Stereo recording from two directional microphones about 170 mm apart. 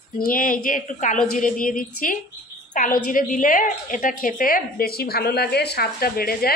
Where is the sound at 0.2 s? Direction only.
55° left (ahead or behind).